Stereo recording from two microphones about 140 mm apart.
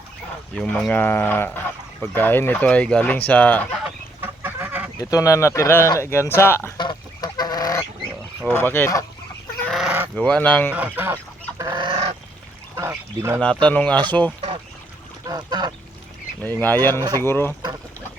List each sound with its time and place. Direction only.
0.5 s speech: 5° left (ahead or behind)
4.2 s goose: 15° right (ahead or behind)
4.9 s speech: 25° left (ahead or behind)
6.7 s goose: 30° left (ahead or behind)
8.4 s speech: 15° left (ahead or behind)
9.7 s fowl: 5° right (ahead or behind)
10.2 s speech: 10° left (ahead or behind)
10.7 s speech: 15° right (ahead or behind)
11.5 s goose: 30° right (ahead or behind)
12.7 s pour: 20° right (ahead or behind)
13.4 s speech: 10° left (ahead or behind)
15.3 s duck: 30° right (ahead or behind)
16.4 s speech: 15° left (ahead or behind)